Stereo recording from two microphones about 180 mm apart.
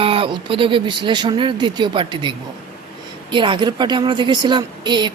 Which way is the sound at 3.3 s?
25° right (ahead or behind).